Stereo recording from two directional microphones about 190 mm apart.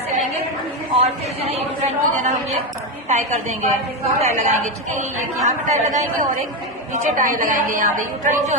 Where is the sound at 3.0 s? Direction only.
40° right (ahead or behind).